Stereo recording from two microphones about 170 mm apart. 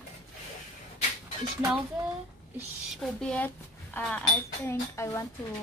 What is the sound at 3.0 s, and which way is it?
A woman's voice, 5° left (ahead or behind).